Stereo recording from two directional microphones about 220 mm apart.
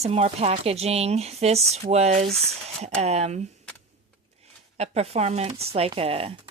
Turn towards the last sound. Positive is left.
turn(degrees=-25)  # may be behind; listen again after turning